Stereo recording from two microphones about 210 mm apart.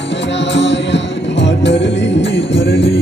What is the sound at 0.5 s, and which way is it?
Music, 60° left (ahead or behind).